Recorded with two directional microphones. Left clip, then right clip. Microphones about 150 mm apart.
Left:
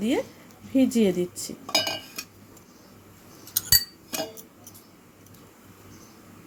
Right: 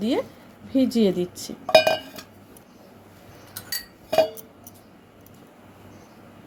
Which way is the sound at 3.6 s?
15° left (ahead or behind).